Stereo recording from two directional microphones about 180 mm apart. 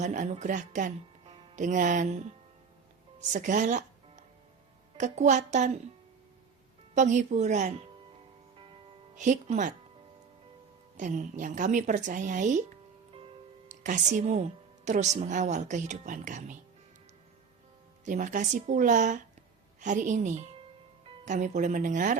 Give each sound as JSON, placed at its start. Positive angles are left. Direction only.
{"t": 0.0, "sound": "speech", "side_deg": -40}
{"t": 3.3, "sound": "speech", "side_deg": -45}
{"t": 6.9, "sound": "speech", "side_deg": -40}
{"t": 9.1, "sound": "a woman's voice", "side_deg": -45}
{"t": 10.9, "sound": "a woman's voice", "side_deg": -45}
{"t": 13.7, "sound": "speech", "side_deg": -40}
{"t": 18.0, "sound": "a woman's voice", "side_deg": -45}